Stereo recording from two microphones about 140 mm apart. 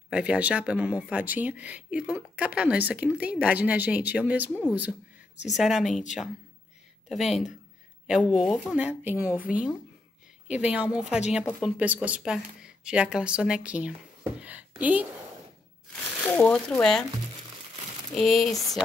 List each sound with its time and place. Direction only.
0.1 s speech: 10° right (ahead or behind)
7.1 s speech: centre (ahead or behind)
10.5 s speech: 10° right (ahead or behind)
16.2 s speech: 10° left (ahead or behind)
18.1 s speech: centre (ahead or behind)